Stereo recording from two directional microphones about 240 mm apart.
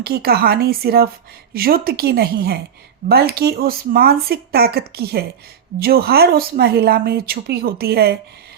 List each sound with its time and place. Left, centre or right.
0.0 s speech: right